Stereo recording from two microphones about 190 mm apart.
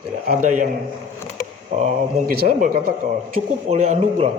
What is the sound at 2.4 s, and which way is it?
Speech, 50° right (ahead or behind).